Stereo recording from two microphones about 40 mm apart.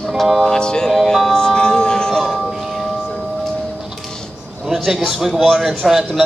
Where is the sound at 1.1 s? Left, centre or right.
Centre.